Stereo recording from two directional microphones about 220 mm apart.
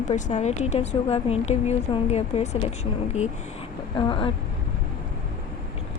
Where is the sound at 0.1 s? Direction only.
30° left (ahead or behind).